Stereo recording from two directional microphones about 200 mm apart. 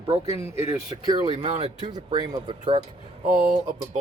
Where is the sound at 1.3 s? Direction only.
35° right (ahead or behind).